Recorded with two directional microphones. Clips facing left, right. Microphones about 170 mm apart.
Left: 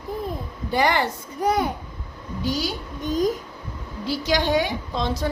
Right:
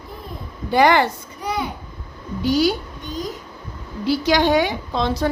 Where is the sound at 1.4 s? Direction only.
45° left (ahead or behind).